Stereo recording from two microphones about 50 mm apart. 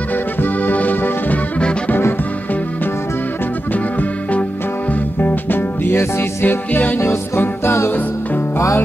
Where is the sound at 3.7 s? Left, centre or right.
Left.